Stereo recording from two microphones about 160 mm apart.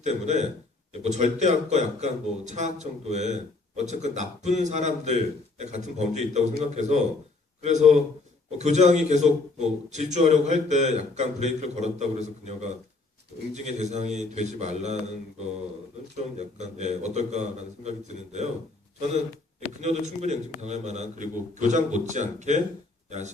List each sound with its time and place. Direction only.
0.0 s a man's voice: 45° right (ahead or behind)
16.1 s a man's voice: 45° right (ahead or behind)
19.8 s a man's voice: 45° right (ahead or behind)